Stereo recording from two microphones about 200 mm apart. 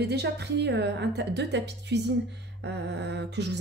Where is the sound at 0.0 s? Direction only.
55° right (ahead or behind).